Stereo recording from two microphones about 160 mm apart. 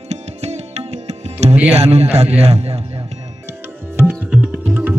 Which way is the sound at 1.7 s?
40° right (ahead or behind).